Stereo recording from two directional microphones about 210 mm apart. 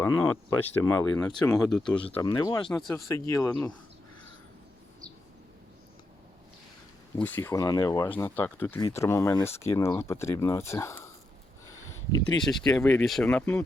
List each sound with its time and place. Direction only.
0.0 s speech: 10° left (ahead or behind)
1.9 s speech: 25° left (ahead or behind)
7.2 s speech: 10° left (ahead or behind)
12.5 s speech: 5° left (ahead or behind)